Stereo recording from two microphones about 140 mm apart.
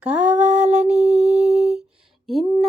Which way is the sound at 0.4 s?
55° right (ahead or behind).